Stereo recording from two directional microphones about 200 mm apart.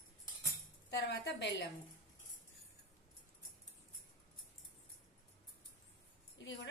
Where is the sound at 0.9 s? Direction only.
60° left (ahead or behind).